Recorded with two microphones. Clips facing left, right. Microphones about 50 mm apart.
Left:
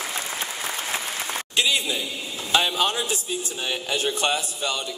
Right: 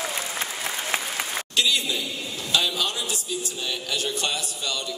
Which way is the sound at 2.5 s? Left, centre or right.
Left.